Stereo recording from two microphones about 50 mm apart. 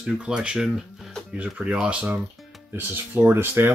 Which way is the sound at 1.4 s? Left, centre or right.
Right.